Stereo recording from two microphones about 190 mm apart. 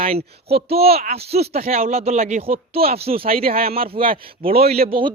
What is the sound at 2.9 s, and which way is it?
Speech, 30° right (ahead or behind).